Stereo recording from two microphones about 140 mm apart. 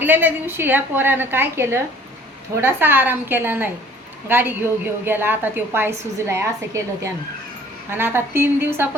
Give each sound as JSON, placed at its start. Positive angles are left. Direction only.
{"t": 0.0, "sound": "a woman's voice", "side_deg": -15}